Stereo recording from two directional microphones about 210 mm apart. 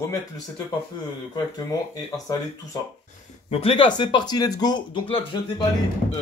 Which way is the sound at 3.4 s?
30° left (ahead or behind).